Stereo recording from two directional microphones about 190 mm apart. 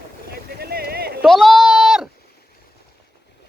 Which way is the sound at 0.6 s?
55° right (ahead or behind).